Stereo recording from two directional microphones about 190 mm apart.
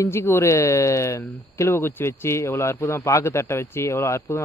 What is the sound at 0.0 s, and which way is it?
Speech, 15° left (ahead or behind).